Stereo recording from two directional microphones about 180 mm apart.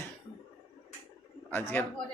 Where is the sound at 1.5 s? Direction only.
10° left (ahead or behind).